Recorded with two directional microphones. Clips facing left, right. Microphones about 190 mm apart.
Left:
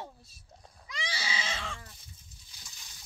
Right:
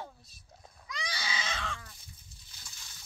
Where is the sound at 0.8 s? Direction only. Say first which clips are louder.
Left 1 dB; 10° left (ahead or behind).